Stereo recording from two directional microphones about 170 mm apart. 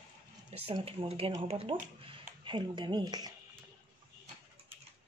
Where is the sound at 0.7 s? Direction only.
35° right (ahead or behind).